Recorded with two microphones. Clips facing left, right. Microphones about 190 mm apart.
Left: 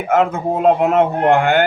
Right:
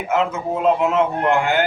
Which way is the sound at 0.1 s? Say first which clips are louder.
Left 5 dB; 55° left (ahead or behind).